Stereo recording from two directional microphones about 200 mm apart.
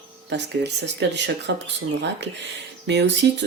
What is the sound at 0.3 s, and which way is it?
Speech, 60° right (ahead or behind).